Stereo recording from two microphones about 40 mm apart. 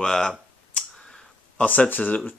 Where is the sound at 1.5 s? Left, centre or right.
Left.